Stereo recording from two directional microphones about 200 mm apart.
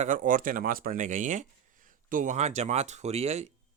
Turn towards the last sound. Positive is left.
turn(degrees=-35)  # may be behind; listen again after turning